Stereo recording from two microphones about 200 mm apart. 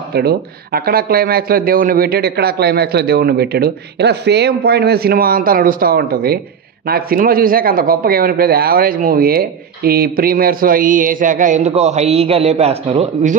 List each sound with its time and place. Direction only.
0.1 s speech: 50° right (ahead or behind); by 13.4 s 35° right (ahead or behind)